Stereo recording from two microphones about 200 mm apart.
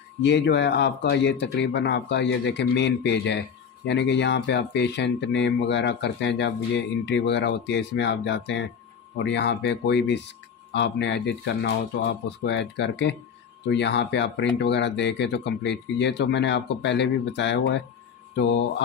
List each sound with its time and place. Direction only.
0.2 s speech: 60° left (ahead or behind)
18.3 s mantra: 60° left (ahead or behind)